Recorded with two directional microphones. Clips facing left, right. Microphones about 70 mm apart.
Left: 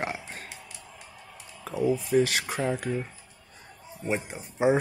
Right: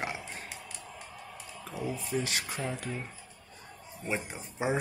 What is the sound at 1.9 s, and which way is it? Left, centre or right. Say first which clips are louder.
Speech: left 9 dB; left.